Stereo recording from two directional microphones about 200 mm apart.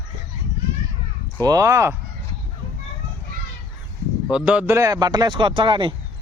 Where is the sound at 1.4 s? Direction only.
15° right (ahead or behind).